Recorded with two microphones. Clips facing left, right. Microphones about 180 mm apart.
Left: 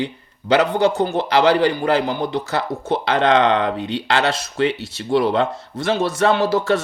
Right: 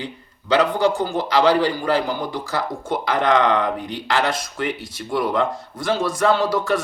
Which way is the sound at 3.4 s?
30° left (ahead or behind).